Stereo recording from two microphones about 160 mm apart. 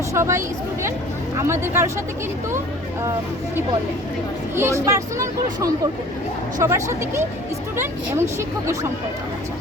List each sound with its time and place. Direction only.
0.1 s speech: 15° right (ahead or behind)
4.5 s speech: 15° right (ahead or behind)